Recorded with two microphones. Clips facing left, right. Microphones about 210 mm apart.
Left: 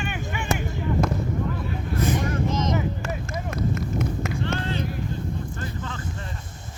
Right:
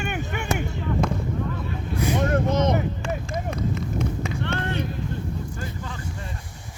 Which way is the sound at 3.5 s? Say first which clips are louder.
Left 3 dB; 5° left (ahead or behind).